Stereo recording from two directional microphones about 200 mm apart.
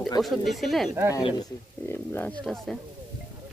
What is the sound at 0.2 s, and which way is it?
Speech, centre (ahead or behind).